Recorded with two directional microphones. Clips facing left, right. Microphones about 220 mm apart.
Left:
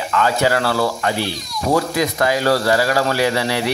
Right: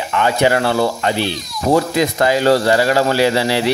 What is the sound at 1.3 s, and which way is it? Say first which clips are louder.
Speech: right 1 dB; centre (ahead or behind).